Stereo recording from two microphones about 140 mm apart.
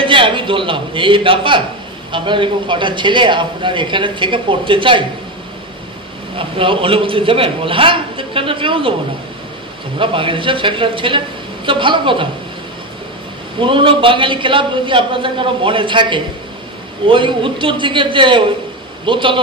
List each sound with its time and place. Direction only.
0.0 s a man's voice: 35° right (ahead or behind)
6.3 s a man's voice: 40° right (ahead or behind)
9.9 s a man's voice: 40° right (ahead or behind)
13.6 s a man's voice: 40° right (ahead or behind)